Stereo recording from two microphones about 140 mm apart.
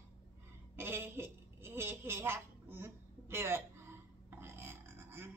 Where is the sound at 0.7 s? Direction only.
15° right (ahead or behind).